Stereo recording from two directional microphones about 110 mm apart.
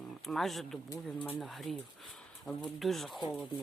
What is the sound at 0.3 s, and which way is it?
Speech, centre (ahead or behind).